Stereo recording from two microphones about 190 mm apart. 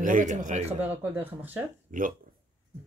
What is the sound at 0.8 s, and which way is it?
Speech, 10° right (ahead or behind).